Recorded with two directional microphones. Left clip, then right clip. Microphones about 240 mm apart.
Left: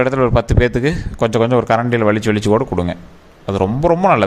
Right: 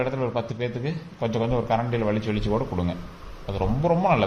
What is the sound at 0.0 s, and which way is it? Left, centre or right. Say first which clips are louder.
Speech: left 12 dB; left.